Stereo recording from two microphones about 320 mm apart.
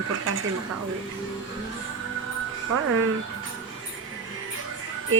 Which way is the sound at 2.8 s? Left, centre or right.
Right.